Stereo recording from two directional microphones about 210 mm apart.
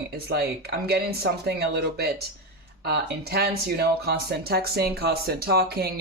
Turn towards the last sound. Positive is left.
turn(degrees=-45)  # may be behind; listen again after turning